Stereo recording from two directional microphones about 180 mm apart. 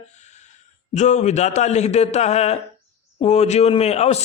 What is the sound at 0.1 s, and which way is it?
A man's voice, 40° left (ahead or behind).